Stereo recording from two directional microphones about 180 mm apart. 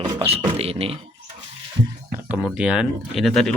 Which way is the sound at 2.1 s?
10° right (ahead or behind).